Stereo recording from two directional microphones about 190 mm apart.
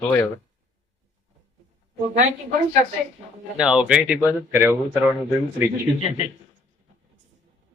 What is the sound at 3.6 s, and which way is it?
Speech, 5° right (ahead or behind).